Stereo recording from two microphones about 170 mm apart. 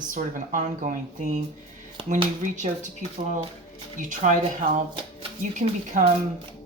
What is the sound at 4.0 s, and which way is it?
Speech, 50° right (ahead or behind).